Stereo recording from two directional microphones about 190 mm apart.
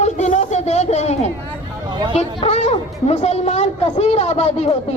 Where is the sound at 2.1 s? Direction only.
35° left (ahead or behind).